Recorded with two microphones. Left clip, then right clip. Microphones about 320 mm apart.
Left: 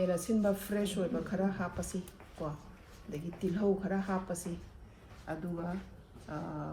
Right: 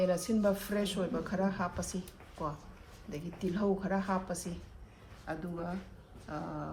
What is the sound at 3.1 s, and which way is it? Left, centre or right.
Speech, centre.